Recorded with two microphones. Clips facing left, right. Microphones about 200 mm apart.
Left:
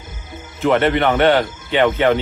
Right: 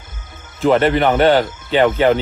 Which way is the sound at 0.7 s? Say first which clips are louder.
Right 2 dB; 30° right (ahead or behind).